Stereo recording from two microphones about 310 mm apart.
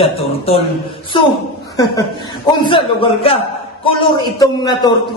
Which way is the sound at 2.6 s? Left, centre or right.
Centre.